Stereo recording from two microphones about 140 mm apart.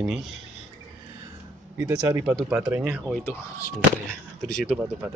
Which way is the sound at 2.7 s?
10° right (ahead or behind).